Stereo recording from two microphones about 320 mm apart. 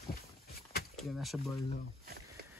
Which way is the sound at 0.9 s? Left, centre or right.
Centre.